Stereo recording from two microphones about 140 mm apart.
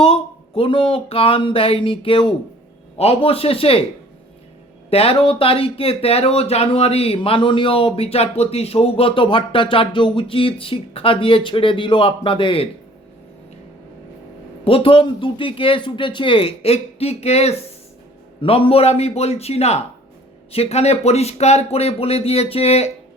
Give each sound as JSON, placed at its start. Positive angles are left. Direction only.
{"t": 0.0, "sound": "speech", "side_deg": 40}
{"t": 4.9, "sound": "speech", "side_deg": 45}
{"t": 14.6, "sound": "speech", "side_deg": 40}